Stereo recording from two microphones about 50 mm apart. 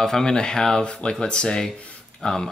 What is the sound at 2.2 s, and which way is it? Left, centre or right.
Speech, centre.